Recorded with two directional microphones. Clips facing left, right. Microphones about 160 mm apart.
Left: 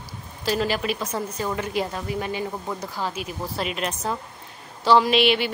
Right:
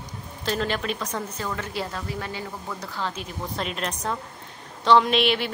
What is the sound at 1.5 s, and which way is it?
A woman's voice, 15° left (ahead or behind).